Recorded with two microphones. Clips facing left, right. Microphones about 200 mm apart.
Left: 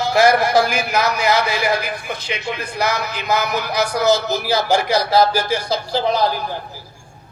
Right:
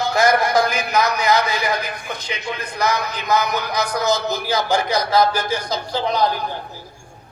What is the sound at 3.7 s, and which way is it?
Speech, 30° left (ahead or behind).